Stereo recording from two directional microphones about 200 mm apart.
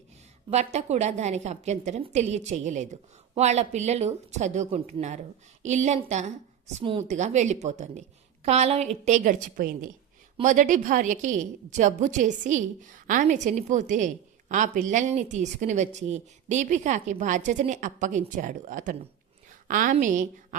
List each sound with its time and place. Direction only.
0.5 s a woman's voice: 35° right (ahead or behind)